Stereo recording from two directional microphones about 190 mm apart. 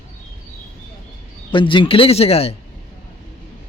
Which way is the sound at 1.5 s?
25° left (ahead or behind).